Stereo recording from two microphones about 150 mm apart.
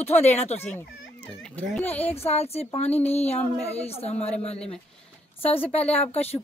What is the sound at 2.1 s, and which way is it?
Speech, 45° left (ahead or behind).